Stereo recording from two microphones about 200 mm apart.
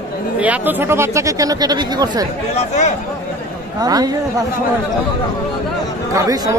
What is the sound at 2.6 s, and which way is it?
Speech, 35° left (ahead or behind).